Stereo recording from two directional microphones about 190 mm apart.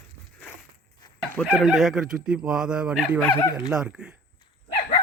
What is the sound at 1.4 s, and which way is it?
Speech, 5° right (ahead or behind).